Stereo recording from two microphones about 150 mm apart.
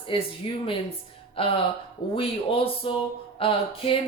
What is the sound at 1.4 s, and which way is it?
Speech, 40° left (ahead or behind).